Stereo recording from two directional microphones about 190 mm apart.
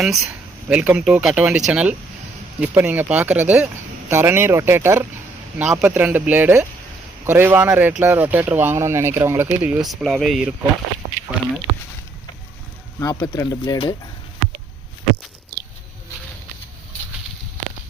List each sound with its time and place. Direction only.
0.0 s speech: centre (ahead or behind)
13.0 s speech: 20° left (ahead or behind)